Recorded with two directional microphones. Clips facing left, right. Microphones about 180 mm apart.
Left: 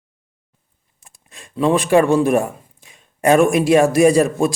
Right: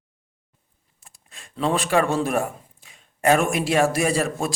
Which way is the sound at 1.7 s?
15° left (ahead or behind).